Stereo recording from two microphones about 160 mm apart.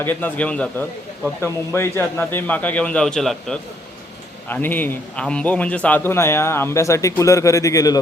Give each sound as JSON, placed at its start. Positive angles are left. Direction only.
{"t": 0.0, "sound": "a man's voice", "side_deg": 10}